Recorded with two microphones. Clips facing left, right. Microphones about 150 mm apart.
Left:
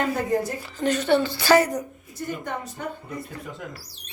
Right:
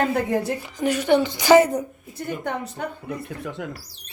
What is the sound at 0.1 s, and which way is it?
Speech, 65° right (ahead or behind).